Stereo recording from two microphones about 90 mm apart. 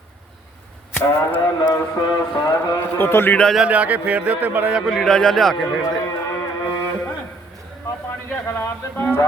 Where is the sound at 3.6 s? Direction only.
15° right (ahead or behind).